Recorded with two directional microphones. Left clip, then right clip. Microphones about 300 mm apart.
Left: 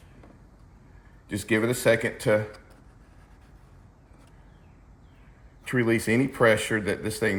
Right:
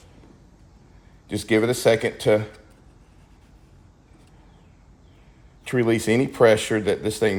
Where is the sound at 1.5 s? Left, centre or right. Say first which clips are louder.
Right 4 dB; right.